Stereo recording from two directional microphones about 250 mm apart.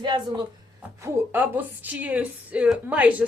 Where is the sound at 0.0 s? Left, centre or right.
Centre.